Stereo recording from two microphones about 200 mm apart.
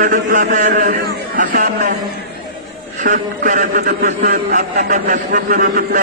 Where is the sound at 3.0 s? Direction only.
40° right (ahead or behind).